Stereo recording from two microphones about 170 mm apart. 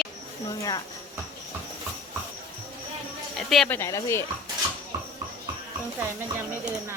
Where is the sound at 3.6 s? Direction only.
15° left (ahead or behind).